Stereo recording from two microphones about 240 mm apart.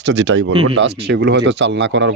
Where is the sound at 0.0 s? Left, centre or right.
Right.